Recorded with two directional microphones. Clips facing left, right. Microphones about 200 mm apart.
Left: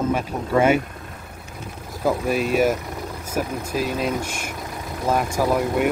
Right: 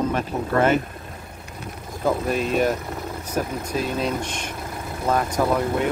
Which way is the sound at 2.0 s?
10° left (ahead or behind).